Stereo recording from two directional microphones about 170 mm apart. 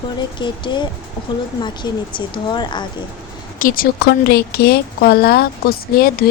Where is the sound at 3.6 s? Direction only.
55° left (ahead or behind).